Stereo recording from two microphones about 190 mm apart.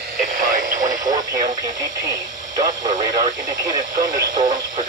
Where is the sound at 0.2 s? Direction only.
45° right (ahead or behind).